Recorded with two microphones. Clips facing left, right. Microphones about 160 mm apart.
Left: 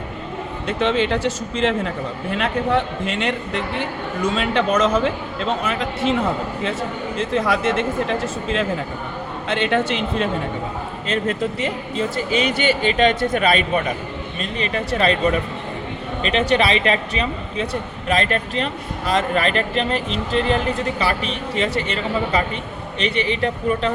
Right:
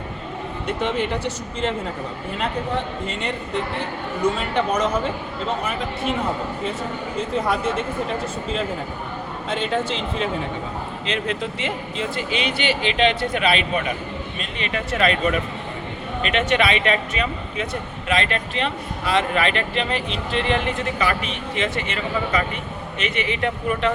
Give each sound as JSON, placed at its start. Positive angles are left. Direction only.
{"t": 0.7, "sound": "a man's voice", "side_deg": 90}
{"t": 7.2, "sound": "a man's voice", "side_deg": 90}
{"t": 11.0, "sound": "speech", "side_deg": 45}